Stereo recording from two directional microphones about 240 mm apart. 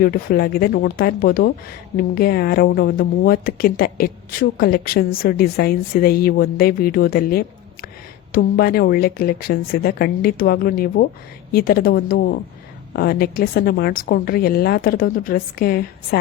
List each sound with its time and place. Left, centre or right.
0.0 s speech: left